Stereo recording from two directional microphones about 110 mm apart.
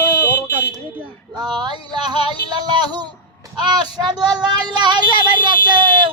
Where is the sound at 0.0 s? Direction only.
20° left (ahead or behind).